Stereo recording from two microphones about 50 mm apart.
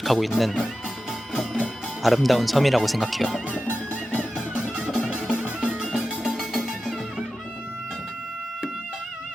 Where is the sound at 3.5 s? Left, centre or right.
Left.